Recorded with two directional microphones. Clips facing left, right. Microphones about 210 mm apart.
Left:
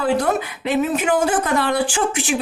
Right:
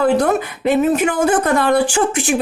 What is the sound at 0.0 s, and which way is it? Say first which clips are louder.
A woman's voice: right 4 dB; 50° right (ahead or behind).